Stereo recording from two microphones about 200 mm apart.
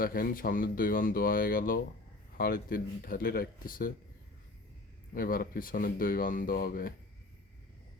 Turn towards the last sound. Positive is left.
turn(degrees=45)  # may be behind; listen again after turning